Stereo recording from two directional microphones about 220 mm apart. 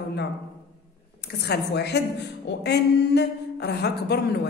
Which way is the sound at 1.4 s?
45° left (ahead or behind).